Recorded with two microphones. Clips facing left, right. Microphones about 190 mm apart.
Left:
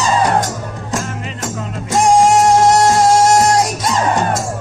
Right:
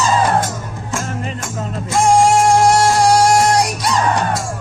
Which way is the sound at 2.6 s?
20° left (ahead or behind).